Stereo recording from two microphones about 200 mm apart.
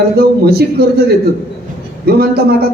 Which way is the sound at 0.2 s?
50° right (ahead or behind).